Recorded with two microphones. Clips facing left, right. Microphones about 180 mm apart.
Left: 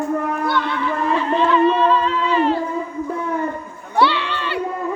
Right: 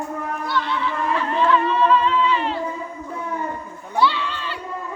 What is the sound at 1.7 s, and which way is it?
Music, 35° left (ahead or behind).